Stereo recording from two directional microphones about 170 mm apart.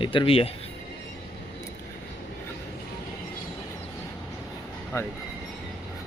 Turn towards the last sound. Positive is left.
turn(degrees=15)  # may be behind; listen again after turning